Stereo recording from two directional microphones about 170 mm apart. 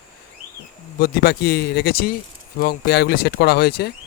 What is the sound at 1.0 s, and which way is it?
Speech, 65° left (ahead or behind).